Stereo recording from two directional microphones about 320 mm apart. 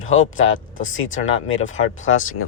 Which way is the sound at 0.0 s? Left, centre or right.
Left.